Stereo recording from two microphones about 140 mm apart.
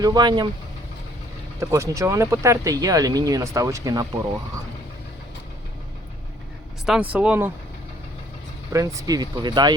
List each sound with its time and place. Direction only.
0.0 s speech: 30° right (ahead or behind)
1.5 s speech: 20° right (ahead or behind)
6.8 s speech: 5° right (ahead or behind)
8.7 s speech: 20° right (ahead or behind)